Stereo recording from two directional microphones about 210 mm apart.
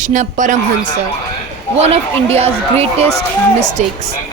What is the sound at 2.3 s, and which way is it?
Speech, 30° right (ahead or behind).